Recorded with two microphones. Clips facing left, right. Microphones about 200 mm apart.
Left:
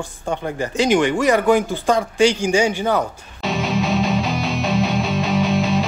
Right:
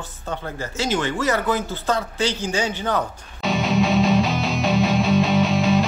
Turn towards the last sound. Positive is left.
turn(degrees=0)  # may be behind; listen again after turning